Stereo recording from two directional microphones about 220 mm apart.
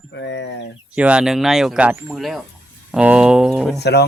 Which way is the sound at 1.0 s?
5° right (ahead or behind).